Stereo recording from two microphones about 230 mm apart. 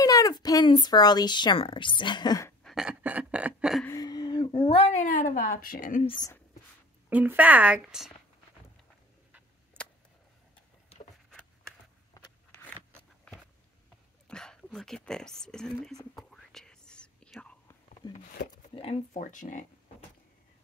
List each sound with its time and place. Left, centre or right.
0.0 s speech: centre
2.6 s a sound: centre
3.8 s a woman's voice: centre; by 6.1 s left
6.1 s speech: centre
7.1 s speech: centre
9.8 s a sound: centre
12.2 s a sound: centre
14.2 s speech: centre
16.2 s whispering: centre
18.0 s speech: centre
18.8 s speech: left